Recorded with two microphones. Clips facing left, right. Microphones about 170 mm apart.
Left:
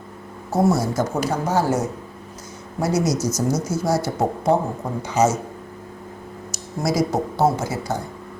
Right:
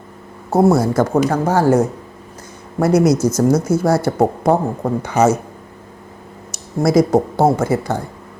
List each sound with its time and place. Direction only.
0.5 s speech: 55° right (ahead or behind)
6.5 s speech: 55° right (ahead or behind)